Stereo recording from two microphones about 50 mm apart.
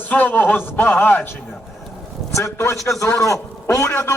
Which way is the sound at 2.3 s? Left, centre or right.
Left.